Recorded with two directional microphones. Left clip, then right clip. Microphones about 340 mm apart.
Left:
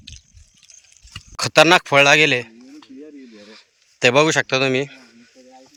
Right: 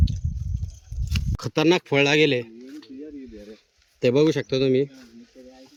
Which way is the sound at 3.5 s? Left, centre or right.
Centre.